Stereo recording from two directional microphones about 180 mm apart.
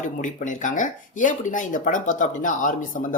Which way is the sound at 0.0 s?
45° left (ahead or behind).